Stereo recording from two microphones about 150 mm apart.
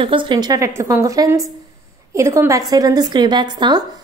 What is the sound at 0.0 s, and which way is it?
A woman's voice, 35° right (ahead or behind).